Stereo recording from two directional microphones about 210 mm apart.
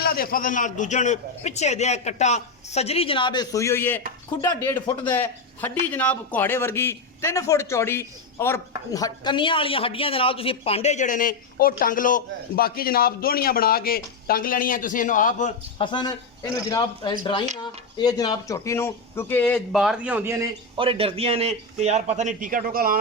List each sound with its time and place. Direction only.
0.0 s a man's voice: 45° left (ahead or behind)
15.8 s a man's voice: 20° left (ahead or behind); by 20.5 s 10° right (ahead or behind)
20.7 s a man's voice: 25° right (ahead or behind); by 23.0 s 45° right (ahead or behind)